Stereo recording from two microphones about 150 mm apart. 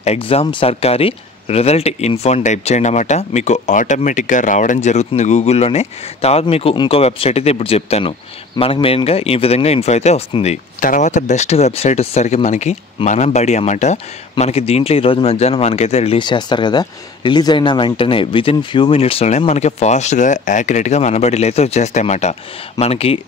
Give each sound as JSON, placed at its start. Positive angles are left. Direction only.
{"t": 0.0, "sound": "speech", "side_deg": 40}
{"t": 16.2, "sound": "speech", "side_deg": 30}